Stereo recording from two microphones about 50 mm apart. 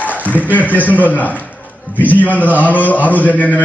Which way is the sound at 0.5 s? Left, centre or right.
Left.